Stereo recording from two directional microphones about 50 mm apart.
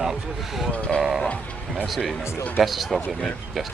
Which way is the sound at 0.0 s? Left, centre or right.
Centre.